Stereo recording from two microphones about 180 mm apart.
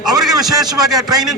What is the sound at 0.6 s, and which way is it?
Speech, 20° right (ahead or behind).